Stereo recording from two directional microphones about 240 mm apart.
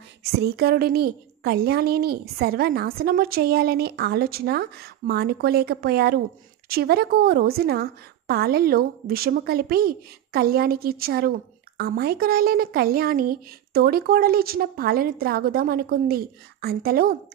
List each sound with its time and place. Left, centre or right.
0.2 s a woman's voice: right